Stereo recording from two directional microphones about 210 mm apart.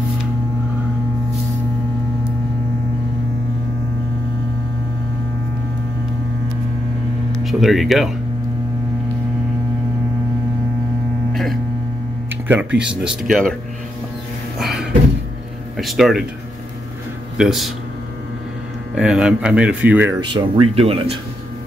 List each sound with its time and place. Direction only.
7.3 s speech: centre (ahead or behind)
12.4 s speech: 5° right (ahead or behind)
14.6 s a sound: centre (ahead or behind)
15.8 s speech: centre (ahead or behind)
17.4 s speech: centre (ahead or behind)
18.9 s speech: 5° right (ahead or behind)
20.2 s speech: 20° right (ahead or behind)